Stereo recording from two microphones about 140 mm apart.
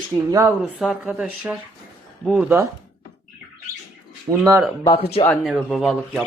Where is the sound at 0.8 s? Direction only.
5° right (ahead or behind).